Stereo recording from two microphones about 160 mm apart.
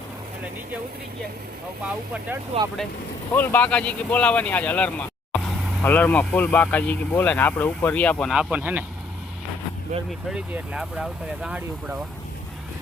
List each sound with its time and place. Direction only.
2.5 s speech: 40° right (ahead or behind)
3.3 s speech: 10° left (ahead or behind)
8.3 s speech: 5° right (ahead or behind)
10.1 s speech: 5° right (ahead or behind)